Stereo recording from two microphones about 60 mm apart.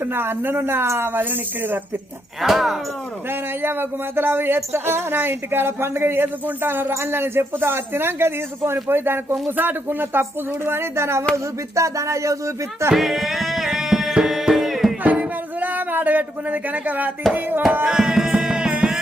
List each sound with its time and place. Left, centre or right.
0.0 s speech: right
2.4 s speech: centre
3.2 s speech: right
11.7 s speech: right
12.9 s music: centre
15.0 s a sound: right
17.8 s music: centre